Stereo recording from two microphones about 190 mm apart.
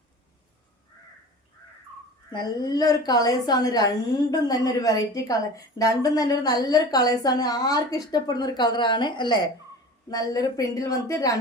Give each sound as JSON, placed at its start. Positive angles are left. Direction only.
{"t": 2.3, "sound": "a woman's voice", "side_deg": 20}